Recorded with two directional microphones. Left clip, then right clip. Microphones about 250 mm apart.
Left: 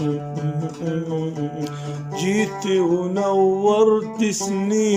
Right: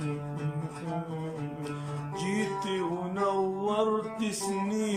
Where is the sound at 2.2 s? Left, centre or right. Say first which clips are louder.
Left 9 dB; left.